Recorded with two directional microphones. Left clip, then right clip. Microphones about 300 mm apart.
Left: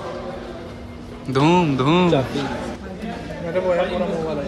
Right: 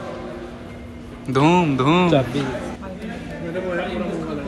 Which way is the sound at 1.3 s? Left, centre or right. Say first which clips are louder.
Even; centre.